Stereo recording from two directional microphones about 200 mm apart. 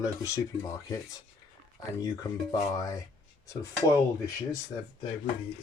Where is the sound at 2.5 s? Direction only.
15° left (ahead or behind).